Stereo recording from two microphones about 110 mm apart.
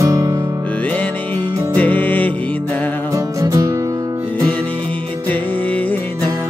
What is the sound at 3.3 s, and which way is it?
Music, 30° right (ahead or behind).